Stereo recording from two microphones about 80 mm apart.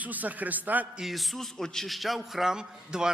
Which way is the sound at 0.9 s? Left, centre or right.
Centre.